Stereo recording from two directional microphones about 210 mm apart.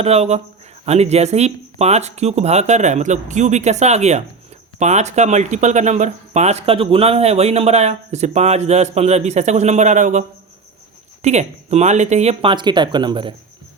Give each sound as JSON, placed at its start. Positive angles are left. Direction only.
{"t": 0.0, "sound": "speech", "side_deg": -30}